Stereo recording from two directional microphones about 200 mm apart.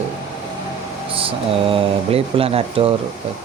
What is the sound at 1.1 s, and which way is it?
Speech, 25° right (ahead or behind).